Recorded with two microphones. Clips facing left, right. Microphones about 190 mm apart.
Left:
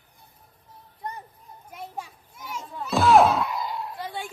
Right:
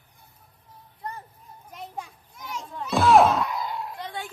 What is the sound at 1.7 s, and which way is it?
Children playing, 5° left (ahead or behind).